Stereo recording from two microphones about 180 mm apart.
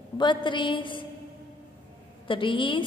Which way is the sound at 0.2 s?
25° left (ahead or behind).